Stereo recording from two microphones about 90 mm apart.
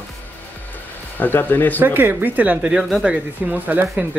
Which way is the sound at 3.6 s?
20° right (ahead or behind).